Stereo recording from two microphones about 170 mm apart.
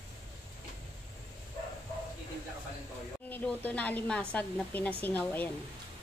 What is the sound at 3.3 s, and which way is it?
A woman's voice, 10° left (ahead or behind).